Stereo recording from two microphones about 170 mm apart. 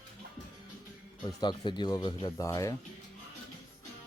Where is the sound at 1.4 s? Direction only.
25° left (ahead or behind).